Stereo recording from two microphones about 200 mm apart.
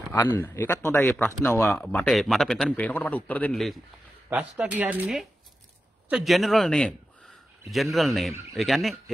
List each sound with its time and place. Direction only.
0.4 s speech: 10° left (ahead or behind)